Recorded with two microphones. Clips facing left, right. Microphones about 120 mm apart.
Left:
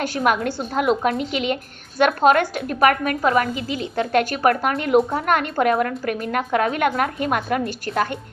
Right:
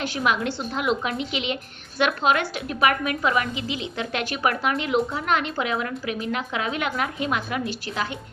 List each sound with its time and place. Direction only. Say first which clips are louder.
0.0 s a woman's voice: left 4 dB; 45° left (ahead or behind)